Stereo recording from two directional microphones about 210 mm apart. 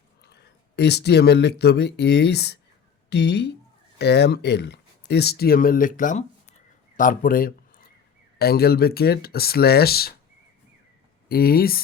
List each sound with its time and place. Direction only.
0.8 s speech: 50° left (ahead or behind)
6.9 s a sound: 40° left (ahead or behind)
8.4 s speech: 45° left (ahead or behind)
11.3 s speech: 45° left (ahead or behind)